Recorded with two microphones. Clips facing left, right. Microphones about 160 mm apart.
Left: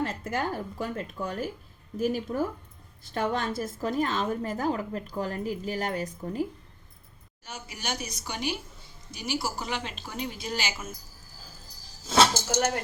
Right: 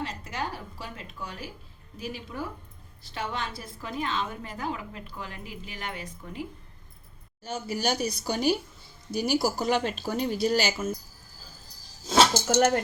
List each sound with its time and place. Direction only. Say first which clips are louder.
0.0 s a woman's voice: left 4 dB; 50° left (ahead or behind)
7.4 s speech: right 8 dB; 35° right (ahead or behind)
12.5 s speech: right 6 dB; 50° right (ahead or behind)